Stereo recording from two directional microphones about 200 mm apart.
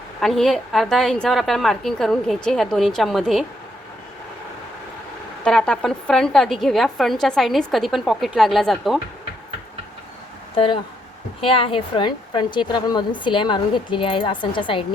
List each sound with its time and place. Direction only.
0.2 s a woman's voice: centre (ahead or behind)
5.5 s a woman's voice: 5° left (ahead or behind)
10.5 s a woman's voice: 25° left (ahead or behind)